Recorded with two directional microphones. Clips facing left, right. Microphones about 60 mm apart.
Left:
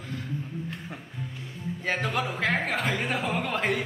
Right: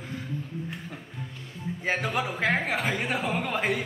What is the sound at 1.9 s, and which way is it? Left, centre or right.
Speech, centre.